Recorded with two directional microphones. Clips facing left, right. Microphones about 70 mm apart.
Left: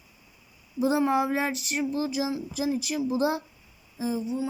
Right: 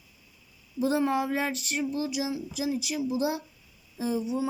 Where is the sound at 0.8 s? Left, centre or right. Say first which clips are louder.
Left 2 dB; centre; by 3.4 s left.